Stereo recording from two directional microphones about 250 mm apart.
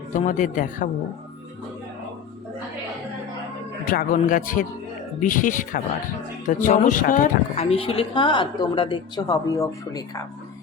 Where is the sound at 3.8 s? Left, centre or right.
Left.